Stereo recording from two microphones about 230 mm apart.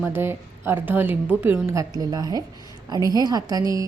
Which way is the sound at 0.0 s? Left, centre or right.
Centre.